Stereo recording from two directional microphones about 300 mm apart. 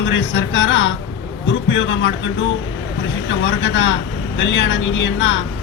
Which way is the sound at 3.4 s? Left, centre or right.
Left.